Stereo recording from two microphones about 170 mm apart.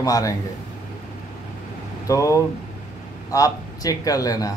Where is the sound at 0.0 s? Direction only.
20° left (ahead or behind).